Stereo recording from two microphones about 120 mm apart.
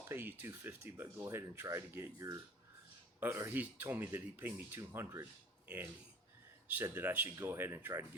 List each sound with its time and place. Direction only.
0.0 s speech: 20° right (ahead or behind)
6.9 s speech: 15° right (ahead or behind)